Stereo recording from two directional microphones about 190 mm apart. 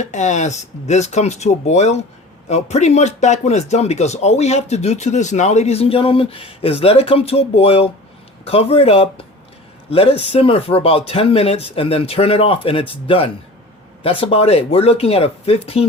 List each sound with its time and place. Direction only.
0.0 s speech: 40° left (ahead or behind)